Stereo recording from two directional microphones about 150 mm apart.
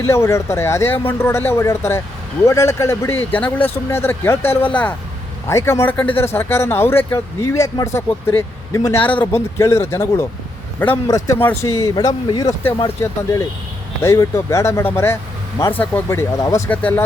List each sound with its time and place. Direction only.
0.1 s speech: 20° left (ahead or behind)
14.0 s speech: 20° left (ahead or behind)